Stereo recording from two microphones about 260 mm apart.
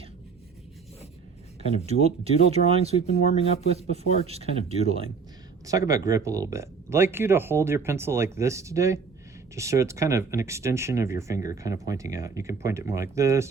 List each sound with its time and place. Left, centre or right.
1.9 s speech: right
3.1 s speech: left
4.3 s speech: right
5.6 s speech: centre